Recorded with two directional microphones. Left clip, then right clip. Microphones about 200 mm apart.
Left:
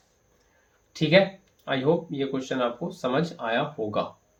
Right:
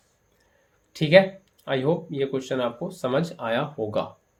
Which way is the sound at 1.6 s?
45° right (ahead or behind).